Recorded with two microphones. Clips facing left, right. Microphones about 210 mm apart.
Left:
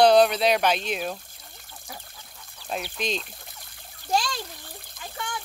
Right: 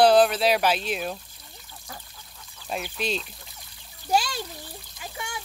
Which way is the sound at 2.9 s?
5° right (ahead or behind).